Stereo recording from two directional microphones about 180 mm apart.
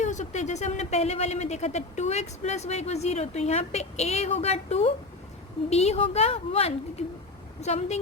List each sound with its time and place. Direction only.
0.0 s speech: 40° left (ahead or behind)